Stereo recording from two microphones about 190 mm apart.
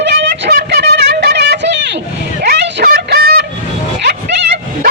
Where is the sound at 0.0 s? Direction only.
65° right (ahead or behind).